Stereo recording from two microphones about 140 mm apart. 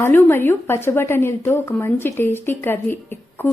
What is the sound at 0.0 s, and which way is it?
A woman's voice, 15° left (ahead or behind).